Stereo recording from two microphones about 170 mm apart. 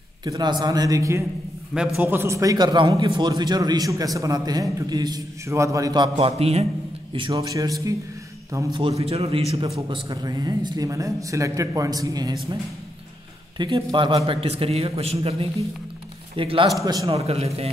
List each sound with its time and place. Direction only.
0.2 s a man's voice: 25° right (ahead or behind)
7.2 s a man's voice: 25° right (ahead or behind)
8.7 s a man's voice: 35° right (ahead or behind)
13.6 s a man's voice: 25° right (ahead or behind)
17.1 s a man's voice: 35° right (ahead or behind)